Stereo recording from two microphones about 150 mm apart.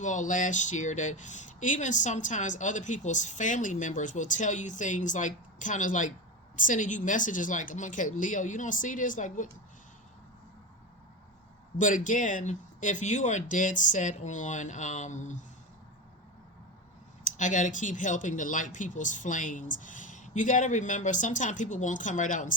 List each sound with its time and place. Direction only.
0.0 s speech: 55° left (ahead or behind)
11.8 s speech: 60° left (ahead or behind)
17.2 s speech: 55° left (ahead or behind)